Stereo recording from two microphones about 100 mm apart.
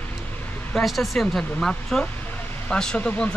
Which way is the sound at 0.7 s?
Centre (ahead or behind).